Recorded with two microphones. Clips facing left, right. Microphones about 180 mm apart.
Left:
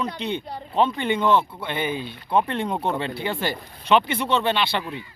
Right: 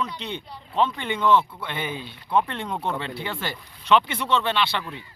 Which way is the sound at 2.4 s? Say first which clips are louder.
Left 6 dB; 45° left (ahead or behind).